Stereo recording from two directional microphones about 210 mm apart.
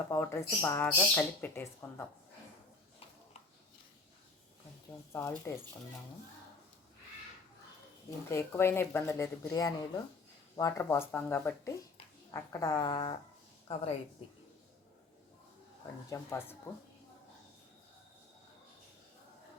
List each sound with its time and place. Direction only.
0.1 s speech: 15° left (ahead or behind)
5.1 s speech: 10° left (ahead or behind)
8.3 s speech: 10° left (ahead or behind)
16.0 s speech: 10° left (ahead or behind)